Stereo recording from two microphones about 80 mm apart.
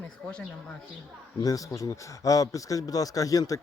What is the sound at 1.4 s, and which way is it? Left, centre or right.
Speech, left.